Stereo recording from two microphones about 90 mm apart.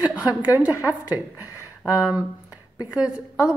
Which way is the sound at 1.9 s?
15° right (ahead or behind).